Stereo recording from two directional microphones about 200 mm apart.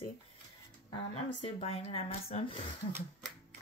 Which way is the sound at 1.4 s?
30° left (ahead or behind).